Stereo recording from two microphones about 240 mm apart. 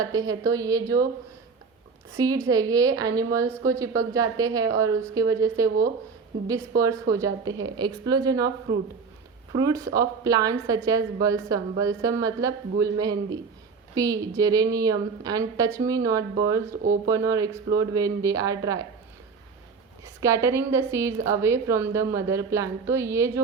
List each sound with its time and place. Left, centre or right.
0.0 s a woman's voice: centre
2.1 s a woman's voice: centre
20.1 s a woman's voice: centre